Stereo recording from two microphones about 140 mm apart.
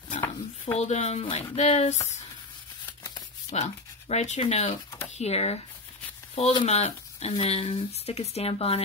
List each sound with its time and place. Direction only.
0.7 s speech: 50° left (ahead or behind)
3.0 s a sound: 30° left (ahead or behind)
3.5 s speech: 55° left (ahead or behind)